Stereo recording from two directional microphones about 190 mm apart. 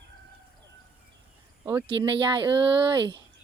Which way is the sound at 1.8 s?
25° right (ahead or behind).